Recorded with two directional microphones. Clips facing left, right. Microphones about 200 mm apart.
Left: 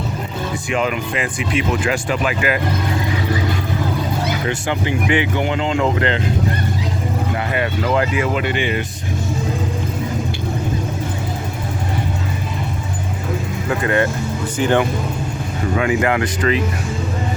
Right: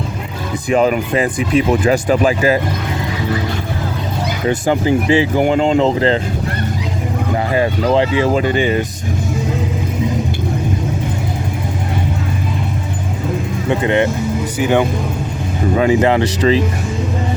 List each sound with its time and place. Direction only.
0.7 s speech: 40° right (ahead or behind)
4.6 s speech: 35° right (ahead or behind)
7.5 s speech: 30° right (ahead or behind)
13.7 s speech: 20° right (ahead or behind)
14.6 s speech: 10° right (ahead or behind)
15.7 s speech: 30° right (ahead or behind)